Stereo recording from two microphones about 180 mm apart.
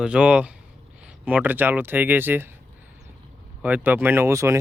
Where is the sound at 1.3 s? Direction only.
10° right (ahead or behind).